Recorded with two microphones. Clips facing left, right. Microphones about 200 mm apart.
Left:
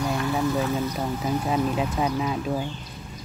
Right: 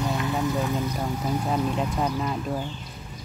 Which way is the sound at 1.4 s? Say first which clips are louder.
Left 2 dB; 5° left (ahead or behind).